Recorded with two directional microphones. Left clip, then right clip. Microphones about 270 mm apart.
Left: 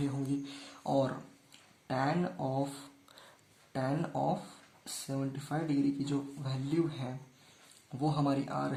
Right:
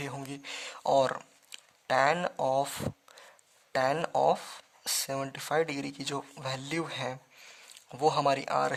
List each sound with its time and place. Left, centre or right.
0.0 s speech: right
3.7 s speech: right